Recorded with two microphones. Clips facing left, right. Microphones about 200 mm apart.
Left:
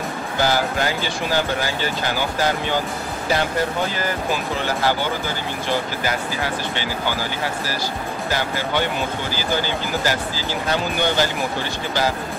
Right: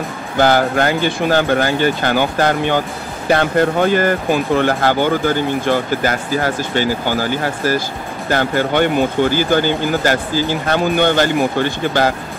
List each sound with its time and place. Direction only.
0.4 s speech: 55° right (ahead or behind)